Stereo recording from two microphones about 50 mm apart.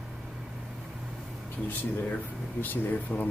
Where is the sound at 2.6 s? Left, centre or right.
Left.